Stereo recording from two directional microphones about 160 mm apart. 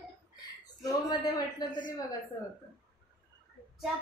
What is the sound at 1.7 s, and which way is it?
Speech, 55° left (ahead or behind).